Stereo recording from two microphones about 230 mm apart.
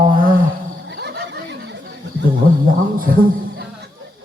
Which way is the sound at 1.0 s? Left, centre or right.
Right.